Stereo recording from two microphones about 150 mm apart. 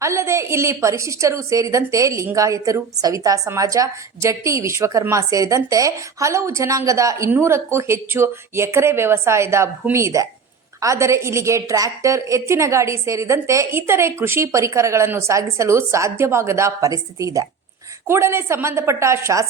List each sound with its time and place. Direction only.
0.0 s a woman's voice: 20° right (ahead or behind)